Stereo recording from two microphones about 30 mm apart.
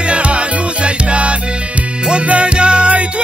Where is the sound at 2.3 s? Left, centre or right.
Right.